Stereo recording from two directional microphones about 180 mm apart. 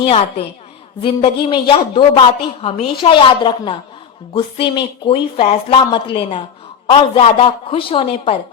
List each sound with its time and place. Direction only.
0.0 s a woman's voice: 30° left (ahead or behind)